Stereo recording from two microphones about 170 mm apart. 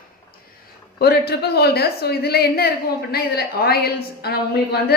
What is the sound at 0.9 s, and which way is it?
A woman's voice, 70° left (ahead or behind).